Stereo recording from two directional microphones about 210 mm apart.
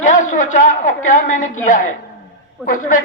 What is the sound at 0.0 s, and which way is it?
A man's voice, 35° left (ahead or behind).